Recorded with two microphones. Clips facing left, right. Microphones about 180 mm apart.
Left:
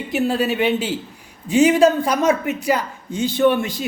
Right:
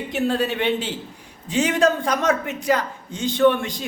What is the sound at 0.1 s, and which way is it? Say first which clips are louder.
A man's voice: left 3 dB; 5° left (ahead or behind).